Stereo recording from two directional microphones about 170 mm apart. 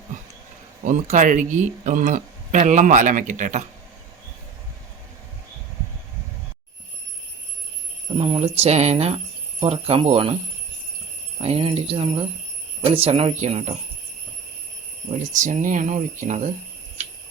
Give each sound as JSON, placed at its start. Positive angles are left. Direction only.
{"t": 0.9, "sound": "speech", "side_deg": -45}
{"t": 8.2, "sound": "speech", "side_deg": -35}
{"t": 11.4, "sound": "speech", "side_deg": -35}
{"t": 15.2, "sound": "speech", "side_deg": -50}